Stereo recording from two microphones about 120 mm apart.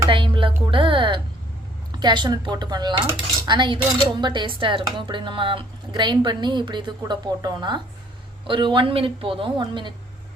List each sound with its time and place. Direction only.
0.1 s music: 45° right (ahead or behind)
1.9 s a woman's voice: 40° right (ahead or behind)